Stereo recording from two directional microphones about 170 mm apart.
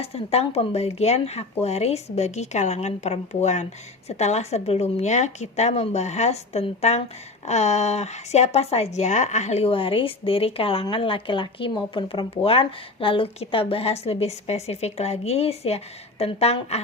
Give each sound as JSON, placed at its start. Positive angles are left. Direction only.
{"t": 0.0, "sound": "speech", "side_deg": 35}